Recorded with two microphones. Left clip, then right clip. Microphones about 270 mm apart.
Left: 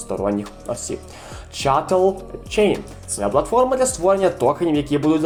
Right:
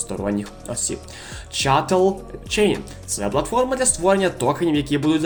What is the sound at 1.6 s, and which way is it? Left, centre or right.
Speech, right.